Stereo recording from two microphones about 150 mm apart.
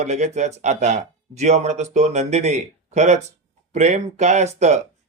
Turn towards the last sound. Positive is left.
turn(degrees=-50)  # may be behind; listen again after turning